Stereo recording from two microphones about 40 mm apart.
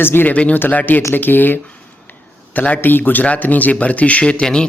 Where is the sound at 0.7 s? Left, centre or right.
Left.